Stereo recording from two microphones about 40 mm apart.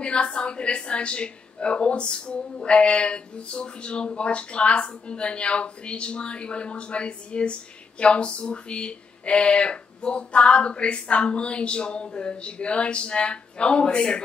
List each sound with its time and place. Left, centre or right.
0.0 s a woman's voice: left